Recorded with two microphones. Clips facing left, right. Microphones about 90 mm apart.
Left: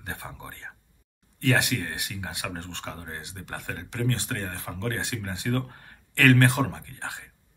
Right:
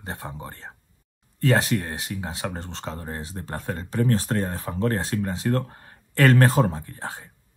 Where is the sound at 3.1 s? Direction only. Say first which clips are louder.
Right 5 dB; 35° right (ahead or behind).